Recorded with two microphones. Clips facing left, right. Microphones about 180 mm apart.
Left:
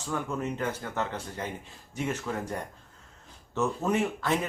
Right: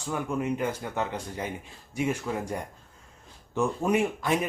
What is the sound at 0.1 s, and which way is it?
Speech, 15° right (ahead or behind).